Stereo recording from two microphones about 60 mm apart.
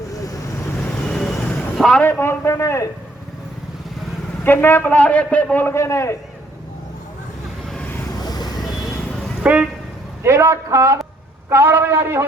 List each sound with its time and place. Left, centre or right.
1.0 s vehicle: centre
1.7 s a sound: centre
2.0 s speech: left
2.4 s a man's voice: left
4.4 s a man's voice: left
5.6 s a man's voice: left
8.2 s vehicle: left
9.4 s vehicle: right
10.2 s speech: right
11.4 s a man's voice: right